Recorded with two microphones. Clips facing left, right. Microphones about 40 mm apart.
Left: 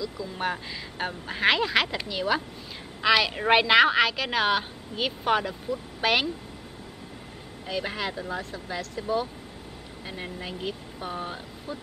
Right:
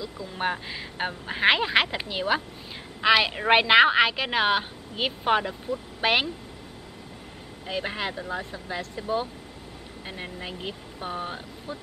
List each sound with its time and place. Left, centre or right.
0.3 s a woman's voice: centre
7.6 s a woman's voice: centre